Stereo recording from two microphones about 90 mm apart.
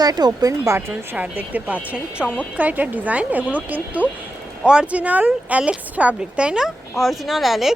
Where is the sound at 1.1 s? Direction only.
15° right (ahead or behind).